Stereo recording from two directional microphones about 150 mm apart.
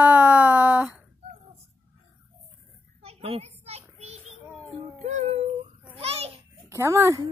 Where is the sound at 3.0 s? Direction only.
40° right (ahead or behind).